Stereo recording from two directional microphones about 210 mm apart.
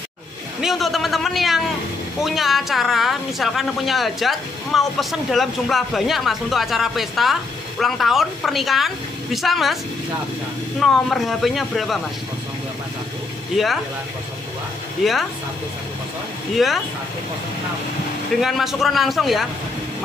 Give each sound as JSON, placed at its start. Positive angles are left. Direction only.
{"t": 0.6, "sound": "a woman's voice", "side_deg": 0}
{"t": 10.8, "sound": "a woman's voice", "side_deg": 0}
{"t": 13.5, "sound": "a woman's voice", "side_deg": 0}
{"t": 15.0, "sound": "a woman's voice", "side_deg": 0}
{"t": 16.5, "sound": "a woman's voice", "side_deg": 0}
{"t": 18.4, "sound": "a woman's voice", "side_deg": 0}